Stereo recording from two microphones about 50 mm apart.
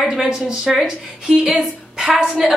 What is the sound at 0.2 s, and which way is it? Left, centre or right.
Speech, centre.